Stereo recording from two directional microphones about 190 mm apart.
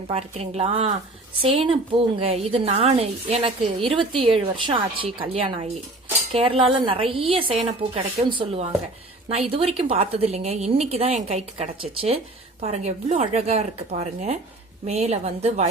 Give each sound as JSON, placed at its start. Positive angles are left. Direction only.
{"t": 0.1, "sound": "a woman's voice", "side_deg": -35}